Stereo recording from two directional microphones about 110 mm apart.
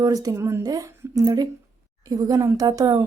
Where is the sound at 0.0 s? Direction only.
30° right (ahead or behind).